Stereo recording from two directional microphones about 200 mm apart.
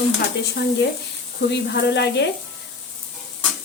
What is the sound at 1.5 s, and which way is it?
Speech, 60° left (ahead or behind).